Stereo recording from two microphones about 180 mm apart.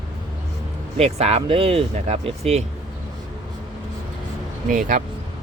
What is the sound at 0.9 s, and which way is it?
Speech, 35° right (ahead or behind).